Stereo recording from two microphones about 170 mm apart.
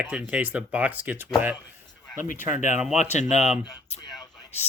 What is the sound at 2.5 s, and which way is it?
Speech, 45° left (ahead or behind).